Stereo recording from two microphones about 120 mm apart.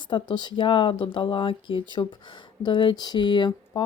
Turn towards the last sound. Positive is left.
turn(degrees=40)  # may be behind; listen again after turning